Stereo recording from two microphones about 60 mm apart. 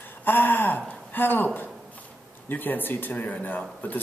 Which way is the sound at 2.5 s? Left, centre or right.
Left.